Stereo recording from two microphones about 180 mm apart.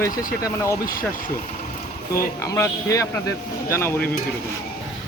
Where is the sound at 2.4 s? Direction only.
15° left (ahead or behind).